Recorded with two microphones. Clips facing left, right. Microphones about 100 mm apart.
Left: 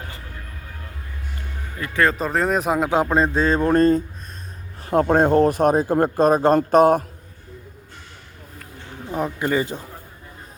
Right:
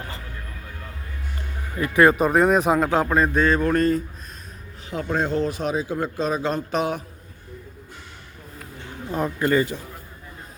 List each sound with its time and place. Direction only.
1.8 s speech: 15° right (ahead or behind); by 2.8 s centre (ahead or behind)
2.8 s a man's voice: 20° left (ahead or behind)
4.9 s speech: 50° left (ahead or behind)
9.1 s speech: 15° left (ahead or behind)